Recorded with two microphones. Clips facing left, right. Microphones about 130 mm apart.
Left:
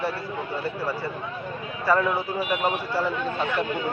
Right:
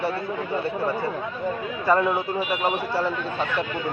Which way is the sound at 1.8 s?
20° right (ahead or behind).